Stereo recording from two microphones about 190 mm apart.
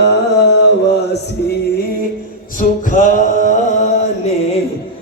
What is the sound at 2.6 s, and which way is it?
Music, 45° left (ahead or behind).